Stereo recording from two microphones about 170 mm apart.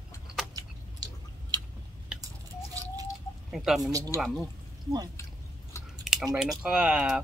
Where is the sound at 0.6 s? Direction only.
25° right (ahead or behind).